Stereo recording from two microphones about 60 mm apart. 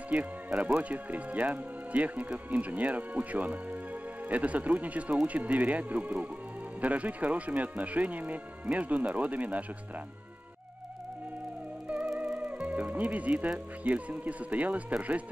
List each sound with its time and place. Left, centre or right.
0.1 s speech: right
12.6 s speech: right